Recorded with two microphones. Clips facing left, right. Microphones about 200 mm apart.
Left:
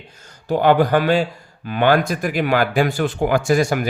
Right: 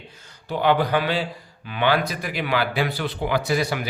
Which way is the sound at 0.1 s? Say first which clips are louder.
Left 8 dB; 45° left (ahead or behind).